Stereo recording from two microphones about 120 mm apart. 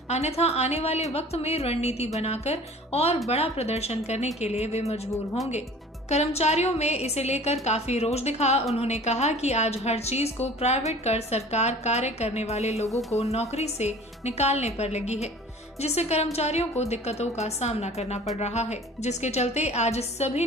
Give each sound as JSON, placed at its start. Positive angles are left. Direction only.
{"t": 0.1, "sound": "a woman's voice", "side_deg": 65}